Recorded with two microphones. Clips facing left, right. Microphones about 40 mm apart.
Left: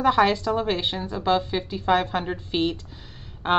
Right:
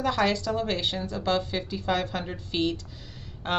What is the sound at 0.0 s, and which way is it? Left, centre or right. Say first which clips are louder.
A woman's voice: left 6 dB; left.